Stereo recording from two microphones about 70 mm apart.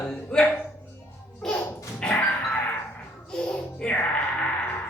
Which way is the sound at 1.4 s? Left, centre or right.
Centre.